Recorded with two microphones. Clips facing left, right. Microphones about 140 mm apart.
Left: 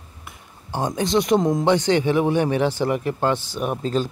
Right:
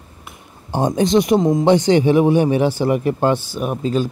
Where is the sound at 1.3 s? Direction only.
5° right (ahead or behind).